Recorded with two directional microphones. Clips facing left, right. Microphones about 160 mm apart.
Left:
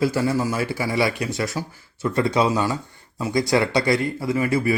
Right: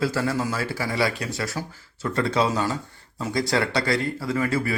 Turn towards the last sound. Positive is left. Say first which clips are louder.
# left 3 dB
turn(degrees=15)  # may be behind; listen again after turning